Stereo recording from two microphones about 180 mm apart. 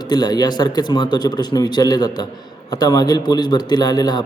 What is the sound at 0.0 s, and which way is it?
A man's voice, 20° left (ahead or behind).